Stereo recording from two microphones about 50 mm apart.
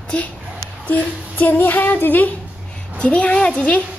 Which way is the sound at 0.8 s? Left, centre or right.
Left.